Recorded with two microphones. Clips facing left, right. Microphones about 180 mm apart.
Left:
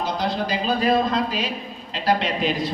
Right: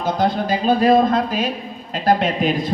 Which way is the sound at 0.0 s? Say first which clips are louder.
Right 5 dB; 50° right (ahead or behind).